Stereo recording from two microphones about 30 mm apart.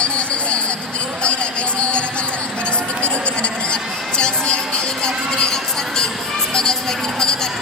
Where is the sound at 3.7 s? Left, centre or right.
Left.